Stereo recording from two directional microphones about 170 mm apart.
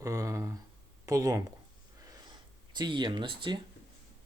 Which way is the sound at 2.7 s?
25° right (ahead or behind).